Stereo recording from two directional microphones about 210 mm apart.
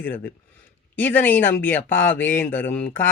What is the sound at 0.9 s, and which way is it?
Speech, 10° left (ahead or behind).